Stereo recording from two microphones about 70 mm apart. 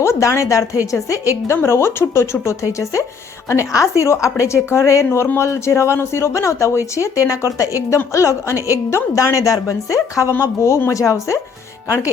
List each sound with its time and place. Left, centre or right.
0.0 s a woman's voice: left